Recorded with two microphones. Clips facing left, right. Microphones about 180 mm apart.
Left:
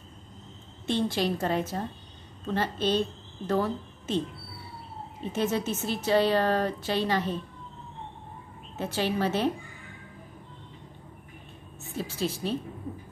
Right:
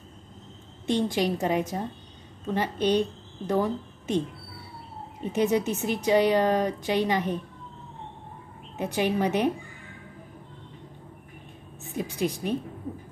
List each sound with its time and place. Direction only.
0.8 s a woman's voice: 15° right (ahead or behind)
5.2 s a woman's voice: 15° right (ahead or behind)
8.7 s a woman's voice: 15° right (ahead or behind)
11.9 s a woman's voice: 15° right (ahead or behind)